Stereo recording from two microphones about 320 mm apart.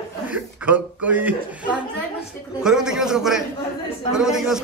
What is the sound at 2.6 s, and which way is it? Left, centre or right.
Speech, centre.